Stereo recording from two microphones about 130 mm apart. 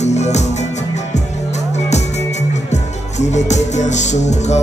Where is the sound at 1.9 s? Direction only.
60° left (ahead or behind).